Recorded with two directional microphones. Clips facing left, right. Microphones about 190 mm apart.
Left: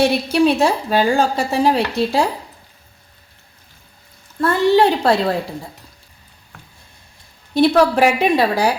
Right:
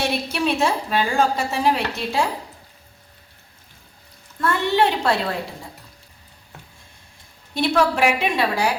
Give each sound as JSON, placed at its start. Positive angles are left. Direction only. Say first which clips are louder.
{"t": 0.0, "sound": "a woman's voice", "louder": "left 8 dB", "side_deg": 35}
{"t": 4.4, "sound": "a woman's voice", "louder": "left 6 dB", "side_deg": 35}
{"t": 7.5, "sound": "a woman's voice", "louder": "left 6 dB", "side_deg": 35}